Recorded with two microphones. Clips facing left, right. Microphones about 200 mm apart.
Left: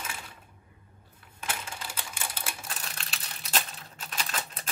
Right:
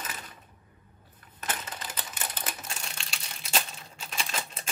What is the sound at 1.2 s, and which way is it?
Crushing, 10° left (ahead or behind).